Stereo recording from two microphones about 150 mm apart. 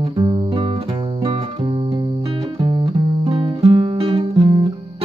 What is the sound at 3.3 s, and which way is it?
Music, 40° right (ahead or behind).